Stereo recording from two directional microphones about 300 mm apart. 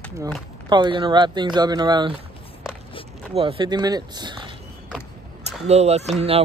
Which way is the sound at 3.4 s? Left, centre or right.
Centre.